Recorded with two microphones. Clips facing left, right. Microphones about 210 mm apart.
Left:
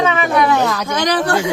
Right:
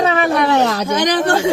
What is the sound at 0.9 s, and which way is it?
Speech, 20° right (ahead or behind).